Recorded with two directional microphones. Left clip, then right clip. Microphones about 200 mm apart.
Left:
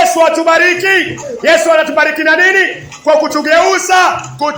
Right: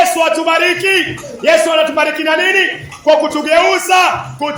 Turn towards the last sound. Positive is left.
turn(degrees=10)  # may be behind; listen again after turning